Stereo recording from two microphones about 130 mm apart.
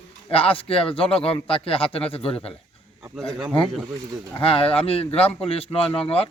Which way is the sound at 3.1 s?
Centre (ahead or behind).